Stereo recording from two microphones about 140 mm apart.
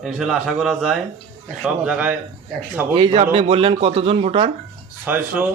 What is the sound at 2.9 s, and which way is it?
Speech, 40° right (ahead or behind).